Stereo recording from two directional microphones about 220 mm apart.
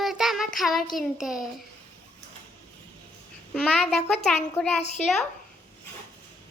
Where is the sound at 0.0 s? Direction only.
Centre (ahead or behind).